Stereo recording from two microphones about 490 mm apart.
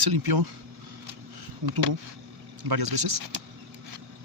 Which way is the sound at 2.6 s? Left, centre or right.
Right.